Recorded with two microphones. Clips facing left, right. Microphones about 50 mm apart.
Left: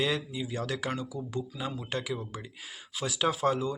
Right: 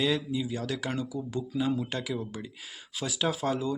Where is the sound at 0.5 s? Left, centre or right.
Left.